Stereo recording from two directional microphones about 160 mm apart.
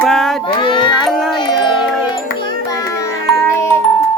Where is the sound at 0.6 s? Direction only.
30° left (ahead or behind).